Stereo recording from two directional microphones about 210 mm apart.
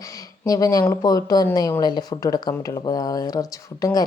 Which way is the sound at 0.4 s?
15° left (ahead or behind).